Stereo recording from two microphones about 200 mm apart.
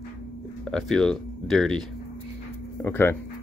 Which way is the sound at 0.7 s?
Centre (ahead or behind).